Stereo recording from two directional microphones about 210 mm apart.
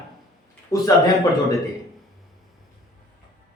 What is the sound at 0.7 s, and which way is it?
Speech, 15° left (ahead or behind).